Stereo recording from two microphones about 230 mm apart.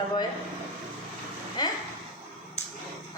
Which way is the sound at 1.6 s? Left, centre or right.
Centre.